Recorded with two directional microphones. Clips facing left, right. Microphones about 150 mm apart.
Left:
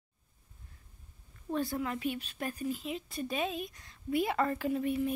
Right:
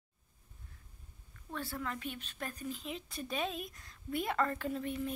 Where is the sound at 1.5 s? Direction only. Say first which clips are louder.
Left 7 dB; 15° left (ahead or behind).